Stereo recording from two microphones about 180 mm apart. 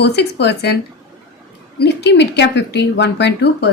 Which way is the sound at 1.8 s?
70° left (ahead or behind).